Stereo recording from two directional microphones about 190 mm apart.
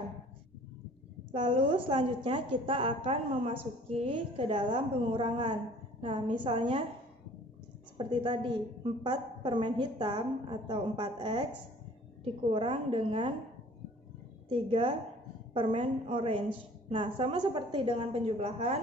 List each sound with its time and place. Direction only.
1.3 s a woman's voice: 25° right (ahead or behind)
8.0 s a woman's voice: 25° right (ahead or behind)
12.4 s a woman's voice: 25° right (ahead or behind)
14.5 s a woman's voice: 30° right (ahead or behind)